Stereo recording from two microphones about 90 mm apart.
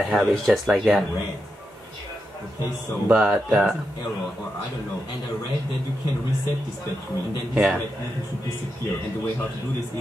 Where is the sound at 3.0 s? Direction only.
5° right (ahead or behind).